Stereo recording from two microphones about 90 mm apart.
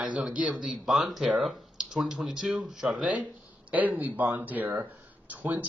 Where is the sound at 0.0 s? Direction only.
15° right (ahead or behind).